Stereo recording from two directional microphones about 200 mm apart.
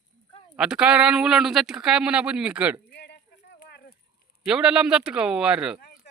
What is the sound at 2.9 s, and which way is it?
Clip-clop, 55° left (ahead or behind).